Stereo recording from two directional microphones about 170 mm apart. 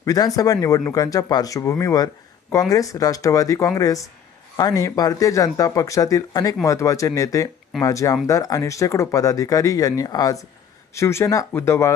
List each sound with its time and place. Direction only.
0.0 s speech: 20° left (ahead or behind)